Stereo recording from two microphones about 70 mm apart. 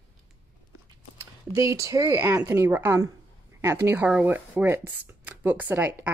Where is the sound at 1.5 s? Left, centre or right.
Right.